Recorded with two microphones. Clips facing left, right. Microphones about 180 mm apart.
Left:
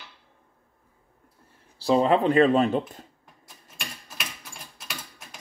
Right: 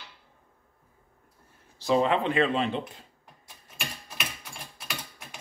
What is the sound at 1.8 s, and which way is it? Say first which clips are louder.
Speech: left 4 dB; 35° left (ahead or behind).